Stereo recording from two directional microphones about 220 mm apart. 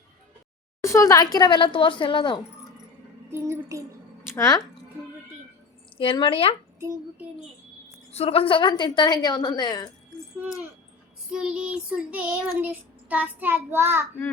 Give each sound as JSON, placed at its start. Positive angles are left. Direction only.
{"t": 0.8, "sound": "a woman's voice", "side_deg": 15}
{"t": 3.3, "sound": "child singing", "side_deg": -15}
{"t": 4.3, "sound": "speech", "side_deg": 15}
{"t": 6.0, "sound": "a woman's voice", "side_deg": 25}
{"t": 8.1, "sound": "a woman's voice", "side_deg": 25}
{"t": 10.3, "sound": "speech", "side_deg": -5}
{"t": 11.3, "sound": "child singing", "side_deg": -5}